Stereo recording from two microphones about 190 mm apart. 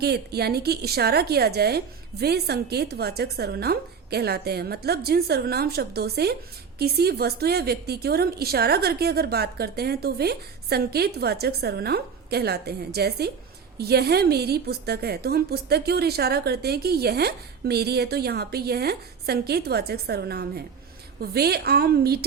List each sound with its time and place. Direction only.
0.0 s a woman's voice: 55° right (ahead or behind)